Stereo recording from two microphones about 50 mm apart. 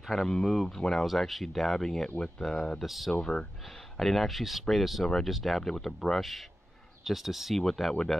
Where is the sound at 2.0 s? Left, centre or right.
Centre.